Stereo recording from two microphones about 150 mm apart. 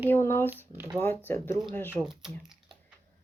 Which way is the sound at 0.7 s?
15° right (ahead or behind).